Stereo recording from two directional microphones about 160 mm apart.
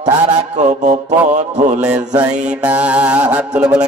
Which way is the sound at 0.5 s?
45° right (ahead or behind).